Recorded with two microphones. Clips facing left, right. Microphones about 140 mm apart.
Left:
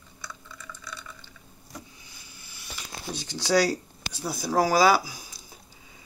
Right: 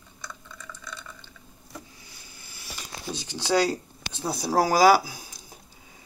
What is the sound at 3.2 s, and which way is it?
Speech, 15° right (ahead or behind).